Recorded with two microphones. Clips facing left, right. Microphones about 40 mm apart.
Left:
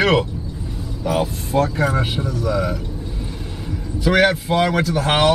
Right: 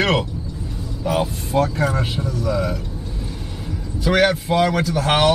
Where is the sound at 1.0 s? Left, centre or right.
Centre.